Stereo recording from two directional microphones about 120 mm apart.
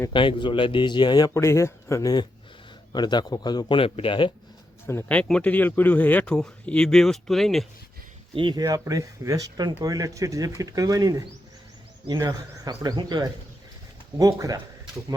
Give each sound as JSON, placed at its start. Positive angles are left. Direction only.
{"t": 0.1, "sound": "speech", "side_deg": 45}
{"t": 1.3, "sound": "speech", "side_deg": 25}
{"t": 4.9, "sound": "speech", "side_deg": 15}
{"t": 8.4, "sound": "speech", "side_deg": -40}
{"t": 8.6, "sound": "speech", "side_deg": -25}